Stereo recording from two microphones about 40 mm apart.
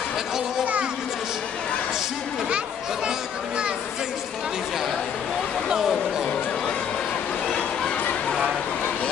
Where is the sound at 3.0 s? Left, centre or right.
Right.